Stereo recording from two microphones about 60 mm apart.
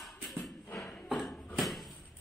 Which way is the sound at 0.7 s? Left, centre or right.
Left.